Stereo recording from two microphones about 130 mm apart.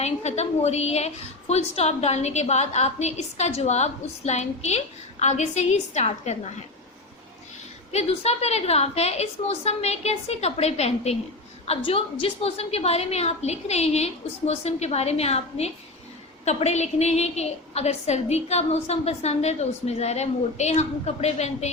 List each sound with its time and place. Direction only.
0.0 s a woman's voice: 55° left (ahead or behind)
7.9 s a woman's voice: 55° left (ahead or behind)
11.8 s a woman's voice: 45° left (ahead or behind)